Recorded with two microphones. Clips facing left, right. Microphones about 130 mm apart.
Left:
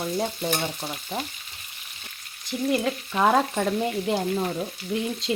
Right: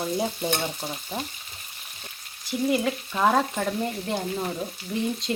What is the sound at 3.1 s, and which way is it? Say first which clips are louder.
Frying: left 2 dB; 10° left (ahead or behind).